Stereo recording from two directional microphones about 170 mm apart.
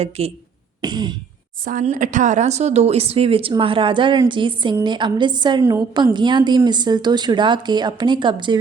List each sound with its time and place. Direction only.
0.2 s speech: 35° right (ahead or behind)
0.8 s throat clearing: 25° right (ahead or behind)
1.8 s a woman's voice: 45° right (ahead or behind); by 8.5 s 30° right (ahead or behind)